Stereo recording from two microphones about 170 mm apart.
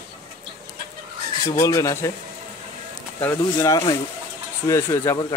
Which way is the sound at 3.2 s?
15° left (ahead or behind).